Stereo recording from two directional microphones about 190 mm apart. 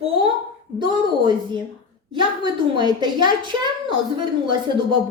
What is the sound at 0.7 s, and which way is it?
Speech, 25° right (ahead or behind).